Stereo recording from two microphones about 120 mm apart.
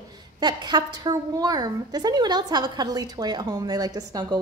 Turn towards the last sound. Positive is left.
turn(degrees=-30)  # may be behind; listen again after turning